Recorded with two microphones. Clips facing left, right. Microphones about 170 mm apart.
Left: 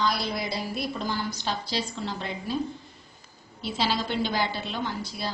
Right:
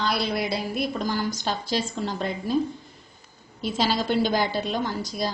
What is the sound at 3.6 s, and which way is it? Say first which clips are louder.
A woman's voice: right 3 dB; 45° right (ahead or behind).